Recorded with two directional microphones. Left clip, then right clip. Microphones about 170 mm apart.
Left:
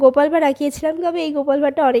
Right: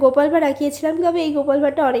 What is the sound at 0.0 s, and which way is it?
A woman's voice, 40° left (ahead or behind).